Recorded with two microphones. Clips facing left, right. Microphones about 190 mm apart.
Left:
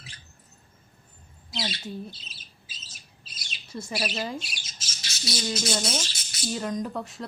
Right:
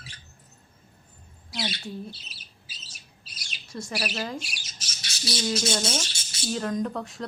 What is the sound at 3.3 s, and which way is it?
Bird, 25° left (ahead or behind).